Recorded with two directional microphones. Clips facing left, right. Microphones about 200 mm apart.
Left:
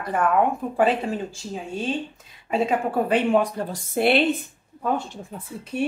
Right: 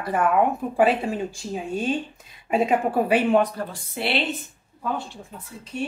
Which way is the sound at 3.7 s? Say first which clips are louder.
Left 10 dB; 50° left (ahead or behind).